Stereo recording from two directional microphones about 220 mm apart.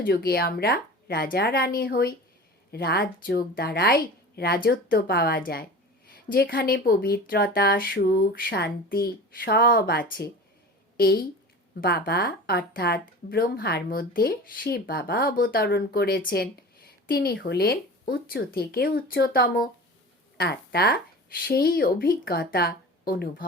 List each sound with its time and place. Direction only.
0.0 s a woman's voice: 45° left (ahead or behind)